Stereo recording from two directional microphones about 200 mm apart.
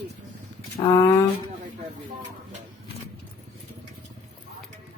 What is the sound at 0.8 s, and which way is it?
Speech, 20° left (ahead or behind).